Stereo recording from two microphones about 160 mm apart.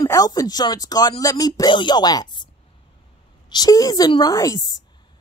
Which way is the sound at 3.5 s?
25° left (ahead or behind).